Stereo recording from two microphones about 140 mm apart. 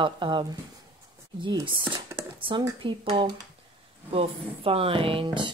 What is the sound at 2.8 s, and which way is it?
Speech, 35° right (ahead or behind).